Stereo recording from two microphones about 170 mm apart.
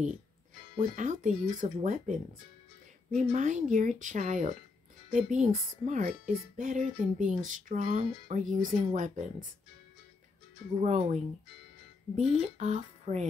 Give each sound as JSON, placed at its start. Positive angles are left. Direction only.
{"t": 0.7, "sound": "speech", "side_deg": -45}
{"t": 3.2, "sound": "speech", "side_deg": -45}
{"t": 10.8, "sound": "speech", "side_deg": -40}
{"t": 12.2, "sound": "speech", "side_deg": -40}